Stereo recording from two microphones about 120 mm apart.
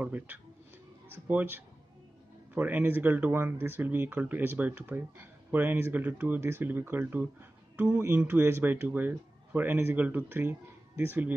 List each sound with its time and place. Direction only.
0.0 s speech: 15° right (ahead or behind)